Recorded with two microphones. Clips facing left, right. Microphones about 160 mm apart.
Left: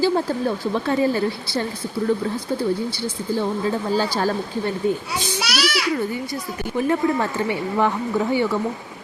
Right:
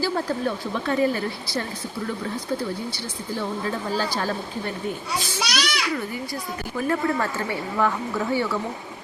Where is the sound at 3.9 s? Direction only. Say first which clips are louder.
Left 4 dB; 30° left (ahead or behind).